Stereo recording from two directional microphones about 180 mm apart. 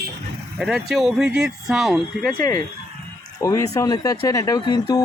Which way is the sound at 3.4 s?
20° left (ahead or behind).